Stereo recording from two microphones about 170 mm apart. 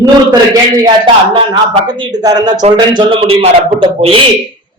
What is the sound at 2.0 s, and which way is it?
A man's voice, 25° right (ahead or behind).